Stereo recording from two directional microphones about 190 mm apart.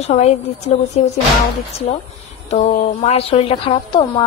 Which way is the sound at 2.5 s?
40° left (ahead or behind).